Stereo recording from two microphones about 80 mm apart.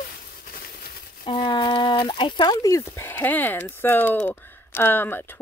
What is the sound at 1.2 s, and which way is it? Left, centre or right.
Speech, left.